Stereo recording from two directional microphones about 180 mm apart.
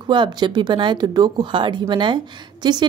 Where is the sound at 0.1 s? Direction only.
25° right (ahead or behind).